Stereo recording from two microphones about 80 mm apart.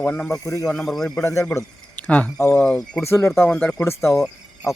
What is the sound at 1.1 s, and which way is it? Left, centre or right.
Speech, left.